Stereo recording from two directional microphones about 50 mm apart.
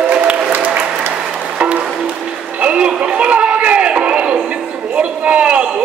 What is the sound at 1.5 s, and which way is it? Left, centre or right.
Music, right.